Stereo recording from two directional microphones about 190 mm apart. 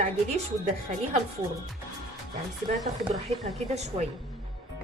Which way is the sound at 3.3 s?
35° right (ahead or behind).